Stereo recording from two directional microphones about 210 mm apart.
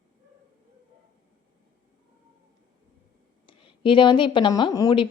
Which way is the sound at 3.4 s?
25° left (ahead or behind).